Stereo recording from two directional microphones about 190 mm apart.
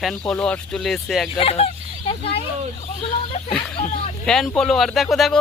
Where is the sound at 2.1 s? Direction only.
30° left (ahead or behind).